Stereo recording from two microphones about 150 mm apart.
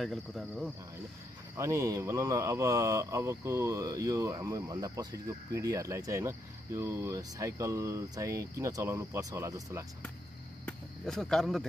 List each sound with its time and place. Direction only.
0.0 s speech: centre (ahead or behind)
1.6 s speech: 20° right (ahead or behind)
10.6 s cricket: 5° left (ahead or behind)